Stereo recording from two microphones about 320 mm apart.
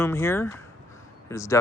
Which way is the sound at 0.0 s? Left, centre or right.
Centre.